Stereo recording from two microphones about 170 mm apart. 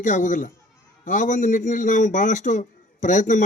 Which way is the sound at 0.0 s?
45° left (ahead or behind).